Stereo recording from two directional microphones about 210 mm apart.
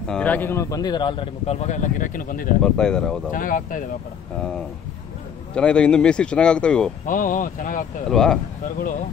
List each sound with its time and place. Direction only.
0.1 s a man's voice: 5° left (ahead or behind); by 2.5 s 40° left (ahead or behind)
2.6 s speech: 5° left (ahead or behind)
3.3 s speech: 40° left (ahead or behind)
5.5 s speech: 5° left (ahead or behind)
7.1 s speech: 40° left (ahead or behind)
8.1 s speech: 5° left (ahead or behind)